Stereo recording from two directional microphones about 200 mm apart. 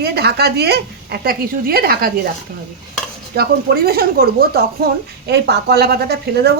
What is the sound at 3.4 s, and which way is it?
A woman's voice, 50° right (ahead or behind).